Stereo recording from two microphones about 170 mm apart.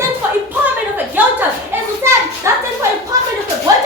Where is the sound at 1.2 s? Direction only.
10° right (ahead or behind).